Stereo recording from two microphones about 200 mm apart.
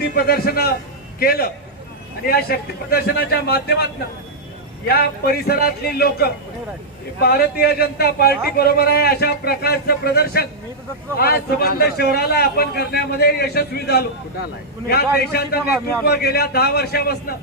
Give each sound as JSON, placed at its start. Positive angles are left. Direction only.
{"t": 0.0, "sound": "a man's voice", "side_deg": 50}
{"t": 4.9, "sound": "a man's voice", "side_deg": 50}